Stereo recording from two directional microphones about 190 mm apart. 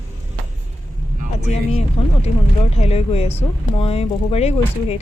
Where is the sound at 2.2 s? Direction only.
35° left (ahead or behind).